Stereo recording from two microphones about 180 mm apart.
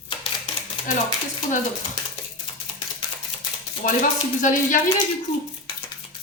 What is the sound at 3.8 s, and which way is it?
Speech, 50° left (ahead or behind).